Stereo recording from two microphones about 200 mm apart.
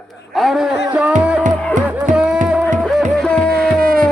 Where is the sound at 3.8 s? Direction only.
45° right (ahead or behind).